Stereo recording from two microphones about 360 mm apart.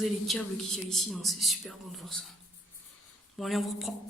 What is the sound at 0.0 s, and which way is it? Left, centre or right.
Speech, centre.